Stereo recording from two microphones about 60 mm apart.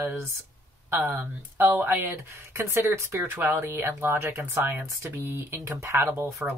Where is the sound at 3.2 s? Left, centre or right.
Right.